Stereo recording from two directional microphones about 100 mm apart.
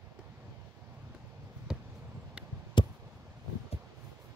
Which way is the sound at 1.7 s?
5° right (ahead or behind).